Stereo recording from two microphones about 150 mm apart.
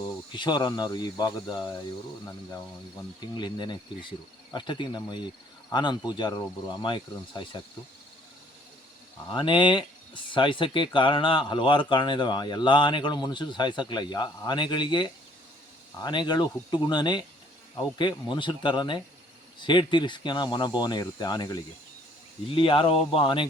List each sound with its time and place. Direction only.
0.3 s speech: 30° left (ahead or behind)
3.3 s speech: 30° left (ahead or behind)
9.3 s speech: 30° left (ahead or behind)